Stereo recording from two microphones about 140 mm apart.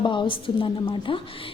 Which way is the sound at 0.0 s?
35° left (ahead or behind).